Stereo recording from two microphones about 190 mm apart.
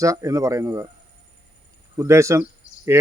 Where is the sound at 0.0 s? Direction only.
15° right (ahead or behind).